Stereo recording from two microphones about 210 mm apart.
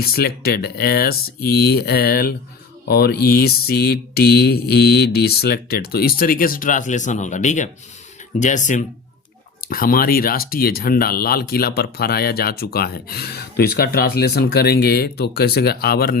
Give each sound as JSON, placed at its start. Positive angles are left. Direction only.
{"t": 0.0, "sound": "speech", "side_deg": 45}